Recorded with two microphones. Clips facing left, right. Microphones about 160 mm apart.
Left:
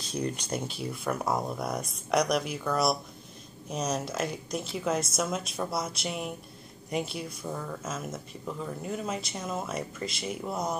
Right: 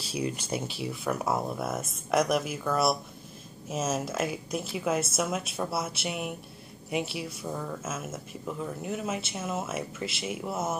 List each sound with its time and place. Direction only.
0.1 s speech: 5° right (ahead or behind)